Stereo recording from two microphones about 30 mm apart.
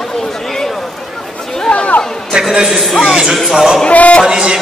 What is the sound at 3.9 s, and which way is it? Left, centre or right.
Music, left.